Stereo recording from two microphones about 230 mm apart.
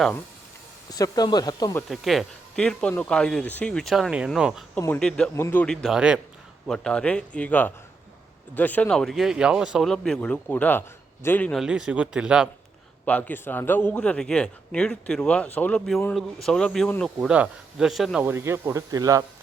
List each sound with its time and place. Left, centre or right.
0.9 s speech: centre
1.9 s a man's voice: centre
13.1 s a man's voice: centre